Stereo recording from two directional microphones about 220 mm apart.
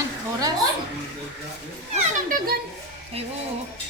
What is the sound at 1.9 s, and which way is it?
Speech, 35° right (ahead or behind).